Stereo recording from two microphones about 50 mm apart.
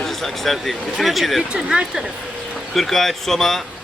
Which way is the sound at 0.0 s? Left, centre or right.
Centre.